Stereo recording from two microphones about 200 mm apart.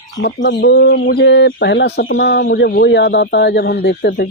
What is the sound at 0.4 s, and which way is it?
Speech, 55° left (ahead or behind).